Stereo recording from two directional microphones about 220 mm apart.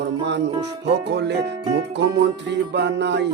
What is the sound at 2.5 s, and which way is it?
Music, 50° right (ahead or behind).